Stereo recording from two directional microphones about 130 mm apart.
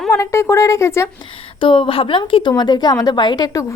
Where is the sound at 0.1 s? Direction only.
20° left (ahead or behind).